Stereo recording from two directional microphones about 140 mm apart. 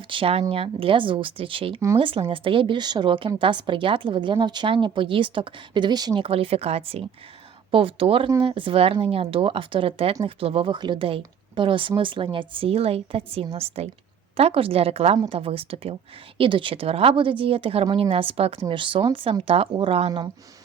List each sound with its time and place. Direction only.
0.1 s a woman's voice: 40° right (ahead or behind)